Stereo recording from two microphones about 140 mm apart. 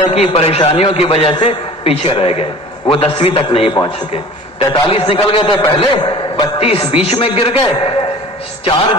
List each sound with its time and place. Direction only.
0.1 s a man's voice: 45° left (ahead or behind)